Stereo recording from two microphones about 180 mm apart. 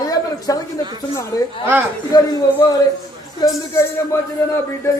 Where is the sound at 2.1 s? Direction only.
20° left (ahead or behind).